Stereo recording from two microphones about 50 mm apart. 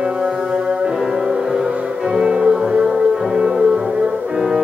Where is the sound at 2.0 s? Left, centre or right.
Centre.